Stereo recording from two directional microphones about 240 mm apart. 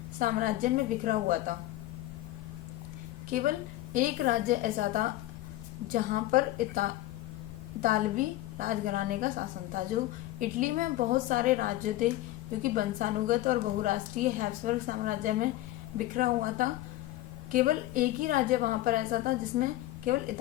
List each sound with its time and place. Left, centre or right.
0.2 s a woman's voice: right
3.3 s a woman's voice: right